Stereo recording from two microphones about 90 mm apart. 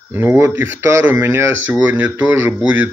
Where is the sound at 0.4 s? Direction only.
25° right (ahead or behind).